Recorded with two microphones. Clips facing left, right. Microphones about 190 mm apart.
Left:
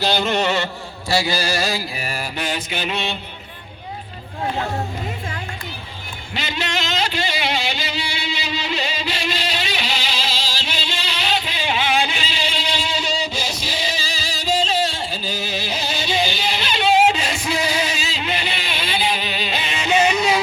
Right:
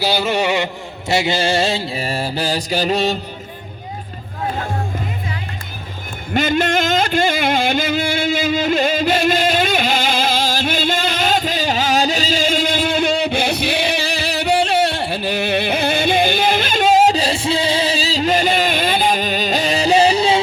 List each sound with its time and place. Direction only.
0.0 s mantra: 10° right (ahead or behind); by 3.2 s 40° right (ahead or behind)
6.3 s music: 50° right (ahead or behind); by 20.4 s 30° right (ahead or behind)